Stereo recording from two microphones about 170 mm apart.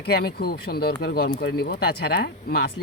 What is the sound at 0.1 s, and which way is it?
Speech, 65° left (ahead or behind).